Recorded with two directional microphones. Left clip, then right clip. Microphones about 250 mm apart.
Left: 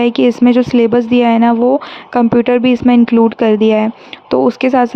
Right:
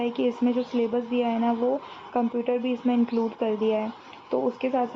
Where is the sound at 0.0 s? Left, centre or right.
Left.